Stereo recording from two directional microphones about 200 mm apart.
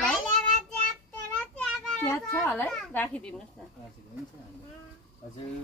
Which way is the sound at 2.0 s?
15° left (ahead or behind).